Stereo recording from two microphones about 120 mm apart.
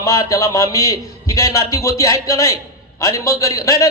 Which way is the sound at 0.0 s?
25° left (ahead or behind).